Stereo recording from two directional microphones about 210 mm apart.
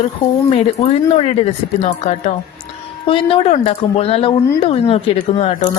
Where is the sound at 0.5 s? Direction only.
30° left (ahead or behind).